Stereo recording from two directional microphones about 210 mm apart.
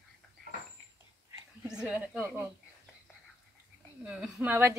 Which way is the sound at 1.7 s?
5° right (ahead or behind).